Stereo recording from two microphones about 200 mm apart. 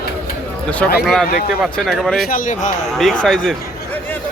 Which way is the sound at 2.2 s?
45° left (ahead or behind).